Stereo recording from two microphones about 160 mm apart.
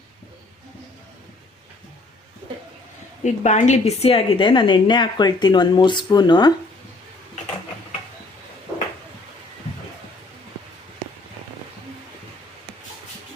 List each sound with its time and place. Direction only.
3.2 s a woman's voice: 45° left (ahead or behind); by 6.5 s 25° left (ahead or behind)